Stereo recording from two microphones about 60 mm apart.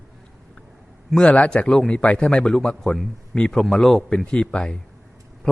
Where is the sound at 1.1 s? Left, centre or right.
Centre.